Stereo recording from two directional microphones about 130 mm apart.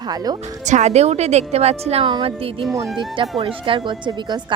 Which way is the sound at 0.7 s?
60° right (ahead or behind).